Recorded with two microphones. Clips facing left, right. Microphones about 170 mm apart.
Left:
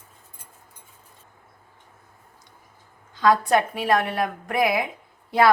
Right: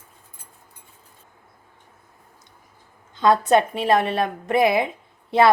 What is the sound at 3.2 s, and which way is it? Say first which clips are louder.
A woman's voice: right 2 dB; 25° right (ahead or behind).